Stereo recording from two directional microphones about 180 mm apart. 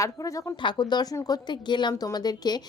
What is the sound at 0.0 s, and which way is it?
A woman's voice, 20° left (ahead or behind).